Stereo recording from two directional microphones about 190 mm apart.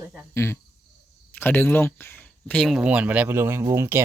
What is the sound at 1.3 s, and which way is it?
Speech, 10° left (ahead or behind).